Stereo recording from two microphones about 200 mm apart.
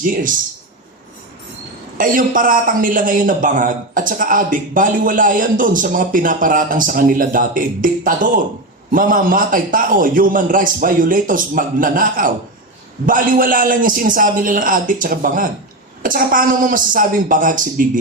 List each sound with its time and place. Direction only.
0.0 s a man's voice: 40° right (ahead or behind)
2.0 s a man's voice: 45° right (ahead or behind)